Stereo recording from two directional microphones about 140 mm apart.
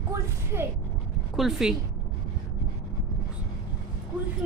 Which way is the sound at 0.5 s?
15° right (ahead or behind).